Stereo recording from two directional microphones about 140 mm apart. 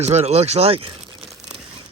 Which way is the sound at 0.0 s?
50° right (ahead or behind).